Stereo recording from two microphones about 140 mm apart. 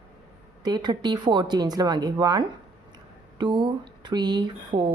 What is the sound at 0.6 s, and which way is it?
A woman's voice, 30° right (ahead or behind).